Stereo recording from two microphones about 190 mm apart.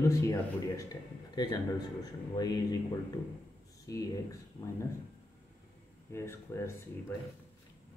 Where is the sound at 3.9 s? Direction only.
20° left (ahead or behind).